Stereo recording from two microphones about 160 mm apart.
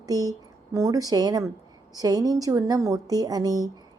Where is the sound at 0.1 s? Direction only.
25° right (ahead or behind).